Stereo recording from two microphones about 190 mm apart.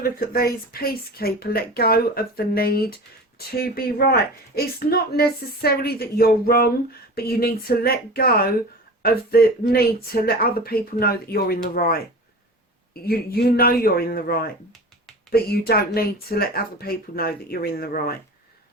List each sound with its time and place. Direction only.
0.0 s speech: 50° left (ahead or behind)